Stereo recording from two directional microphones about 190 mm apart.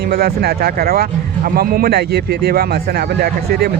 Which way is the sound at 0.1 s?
55° right (ahead or behind).